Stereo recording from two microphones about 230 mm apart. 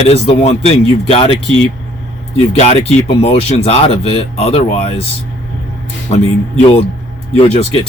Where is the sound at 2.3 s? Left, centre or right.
Left.